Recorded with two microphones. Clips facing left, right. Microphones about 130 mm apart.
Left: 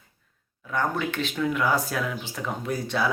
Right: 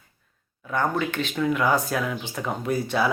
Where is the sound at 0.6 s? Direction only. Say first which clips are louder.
Right 2 dB; centre (ahead or behind).